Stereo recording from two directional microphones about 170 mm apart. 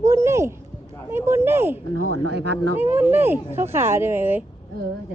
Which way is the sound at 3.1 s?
15° right (ahead or behind).